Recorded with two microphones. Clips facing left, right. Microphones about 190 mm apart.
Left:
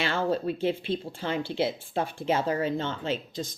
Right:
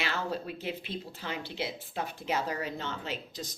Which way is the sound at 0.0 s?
25° left (ahead or behind).